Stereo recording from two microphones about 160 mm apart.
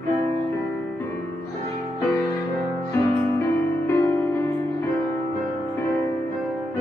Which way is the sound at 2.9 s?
20° left (ahead or behind).